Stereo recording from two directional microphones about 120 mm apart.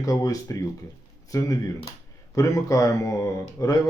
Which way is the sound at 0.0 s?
30° left (ahead or behind).